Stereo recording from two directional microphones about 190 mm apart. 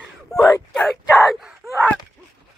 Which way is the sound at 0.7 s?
Centre (ahead or behind).